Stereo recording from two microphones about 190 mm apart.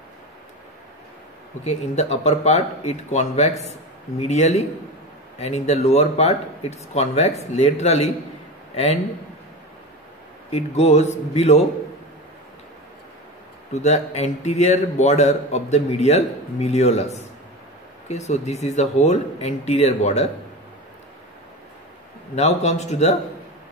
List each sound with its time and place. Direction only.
1.6 s a man's voice: 35° left (ahead or behind)
10.5 s a man's voice: 35° left (ahead or behind)
13.7 s a man's voice: 35° left (ahead or behind)
22.3 s a man's voice: 35° left (ahead or behind)